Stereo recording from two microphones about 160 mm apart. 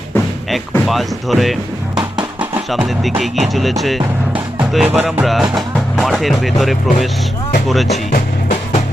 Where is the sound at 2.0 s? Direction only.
30° right (ahead or behind).